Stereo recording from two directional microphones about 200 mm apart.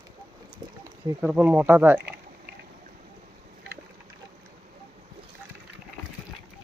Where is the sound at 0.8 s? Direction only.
10° right (ahead or behind).